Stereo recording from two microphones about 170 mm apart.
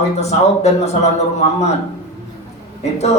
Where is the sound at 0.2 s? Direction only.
40° left (ahead or behind).